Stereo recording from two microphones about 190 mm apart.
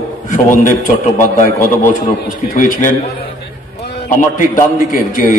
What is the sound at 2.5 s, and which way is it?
Speech, 45° left (ahead or behind).